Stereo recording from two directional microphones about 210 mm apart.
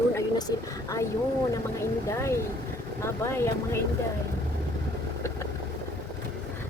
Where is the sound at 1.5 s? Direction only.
15° left (ahead or behind).